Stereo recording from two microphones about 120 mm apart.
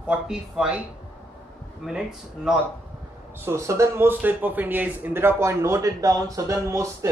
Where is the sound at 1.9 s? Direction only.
5° right (ahead or behind).